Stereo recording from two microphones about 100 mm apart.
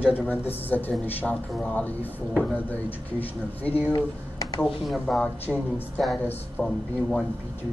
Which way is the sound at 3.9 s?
35° left (ahead or behind).